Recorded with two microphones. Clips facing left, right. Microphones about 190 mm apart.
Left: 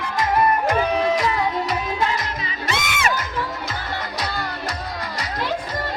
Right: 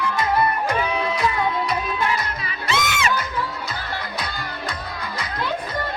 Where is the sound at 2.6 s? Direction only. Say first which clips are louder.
Right 1 dB; 55° left (ahead or behind).